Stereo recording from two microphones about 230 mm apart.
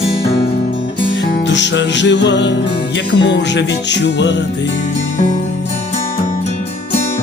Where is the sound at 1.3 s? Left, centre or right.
Left.